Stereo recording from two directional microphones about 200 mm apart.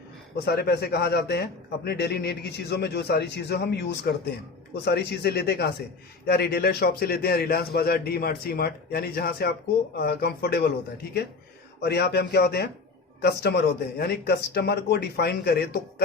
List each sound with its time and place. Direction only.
0.4 s a man's voice: 55° left (ahead or behind)
11.8 s a man's voice: 55° left (ahead or behind)